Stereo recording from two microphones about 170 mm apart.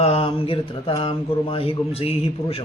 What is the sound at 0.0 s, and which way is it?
Speech, 35° left (ahead or behind).